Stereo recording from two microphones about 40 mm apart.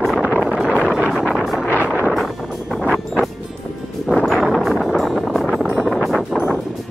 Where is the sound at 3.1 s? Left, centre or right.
Centre.